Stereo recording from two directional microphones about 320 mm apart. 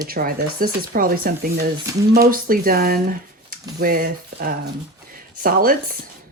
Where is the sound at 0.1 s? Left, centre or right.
Right.